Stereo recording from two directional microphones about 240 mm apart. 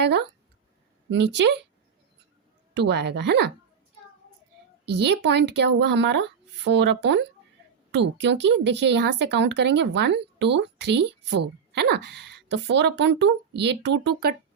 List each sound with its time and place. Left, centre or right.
0.0 s speech: right
2.7 s speech: right
4.9 s speech: right